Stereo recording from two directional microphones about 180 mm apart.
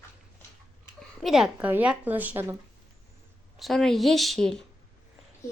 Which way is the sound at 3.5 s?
Centre (ahead or behind).